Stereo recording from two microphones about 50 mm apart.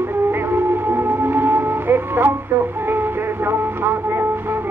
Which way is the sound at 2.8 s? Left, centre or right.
Right.